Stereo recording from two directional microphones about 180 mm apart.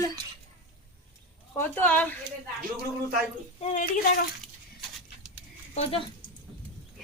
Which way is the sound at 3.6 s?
40° left (ahead or behind).